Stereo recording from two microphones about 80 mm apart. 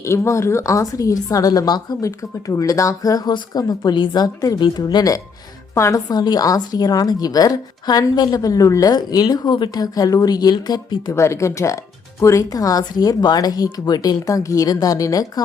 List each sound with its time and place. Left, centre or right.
0.0 s speech: left
2.0 s speech: left
5.7 s a woman's voice: left
6.1 s speech: left
8.9 s speech: left
11.1 s speech: left